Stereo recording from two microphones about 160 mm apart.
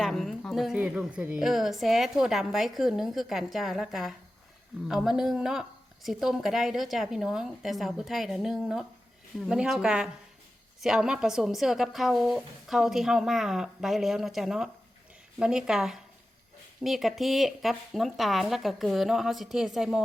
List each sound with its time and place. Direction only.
0.0 s a woman's voice: centre (ahead or behind)